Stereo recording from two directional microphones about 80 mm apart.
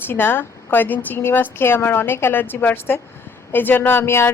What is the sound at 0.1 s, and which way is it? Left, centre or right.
Speech, left.